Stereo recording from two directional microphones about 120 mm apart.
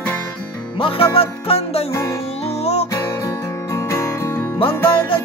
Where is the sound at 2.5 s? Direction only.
60° left (ahead or behind).